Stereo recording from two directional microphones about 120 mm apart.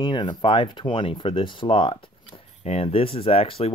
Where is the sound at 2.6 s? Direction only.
55° left (ahead or behind).